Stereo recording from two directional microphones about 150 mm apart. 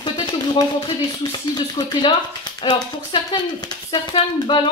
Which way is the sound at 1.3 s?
30° left (ahead or behind).